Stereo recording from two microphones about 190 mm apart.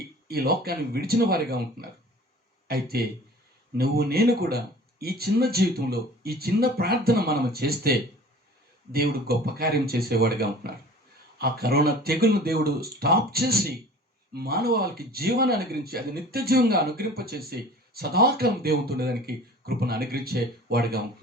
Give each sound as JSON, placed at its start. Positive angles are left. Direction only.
{"t": 0.3, "sound": "a man's voice", "side_deg": -55}